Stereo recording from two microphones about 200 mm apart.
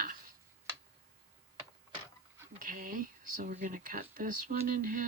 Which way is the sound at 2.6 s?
45° right (ahead or behind).